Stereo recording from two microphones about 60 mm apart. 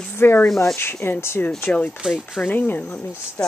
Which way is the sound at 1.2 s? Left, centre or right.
Left.